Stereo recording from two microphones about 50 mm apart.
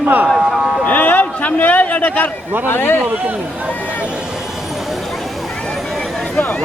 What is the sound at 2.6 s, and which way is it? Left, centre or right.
Speech, left.